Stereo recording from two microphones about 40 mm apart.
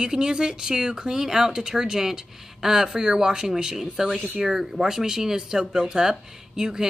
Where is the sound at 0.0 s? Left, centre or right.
Centre.